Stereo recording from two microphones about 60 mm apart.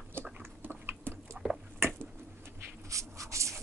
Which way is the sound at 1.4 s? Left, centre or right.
Centre.